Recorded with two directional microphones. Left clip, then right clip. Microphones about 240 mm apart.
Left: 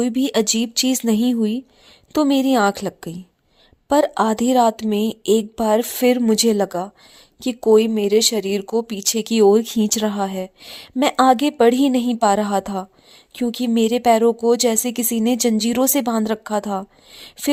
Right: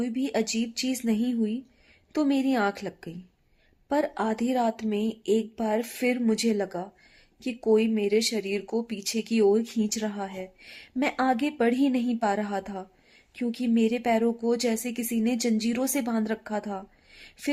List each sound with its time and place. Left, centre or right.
0.0 s speech: left